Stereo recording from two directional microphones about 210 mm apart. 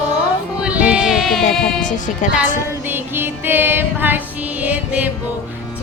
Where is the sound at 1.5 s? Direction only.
35° left (ahead or behind).